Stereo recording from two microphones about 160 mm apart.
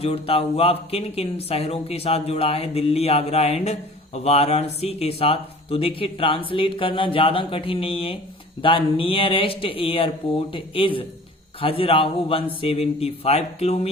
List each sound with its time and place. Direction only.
0.0 s speech: 40° left (ahead or behind)